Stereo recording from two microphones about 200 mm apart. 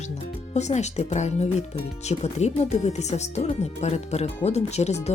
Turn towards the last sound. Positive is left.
turn(degrees=35)  # may be behind; listen again after turning